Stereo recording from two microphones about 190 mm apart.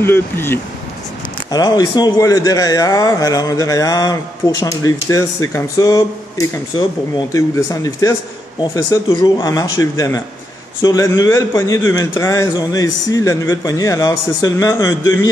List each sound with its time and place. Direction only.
0.0 s a man's voice: 10° left (ahead or behind)